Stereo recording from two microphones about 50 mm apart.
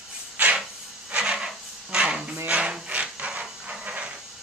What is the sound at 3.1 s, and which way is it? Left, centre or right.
Steam, right.